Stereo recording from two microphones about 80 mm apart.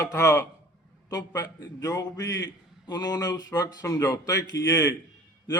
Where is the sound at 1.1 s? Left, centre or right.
Left.